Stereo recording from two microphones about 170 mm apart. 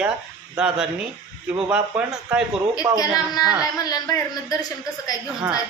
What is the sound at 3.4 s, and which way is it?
Speech, 20° left (ahead or behind).